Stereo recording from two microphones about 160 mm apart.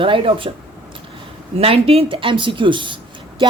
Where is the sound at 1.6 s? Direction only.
35° right (ahead or behind).